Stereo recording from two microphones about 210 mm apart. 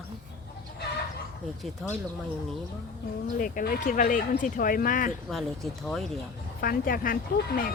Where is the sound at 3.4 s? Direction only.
40° left (ahead or behind).